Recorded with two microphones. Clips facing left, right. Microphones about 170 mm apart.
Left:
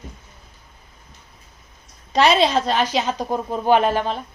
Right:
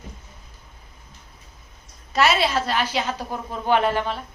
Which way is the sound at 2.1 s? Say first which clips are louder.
Left 4 dB; 25° left (ahead or behind).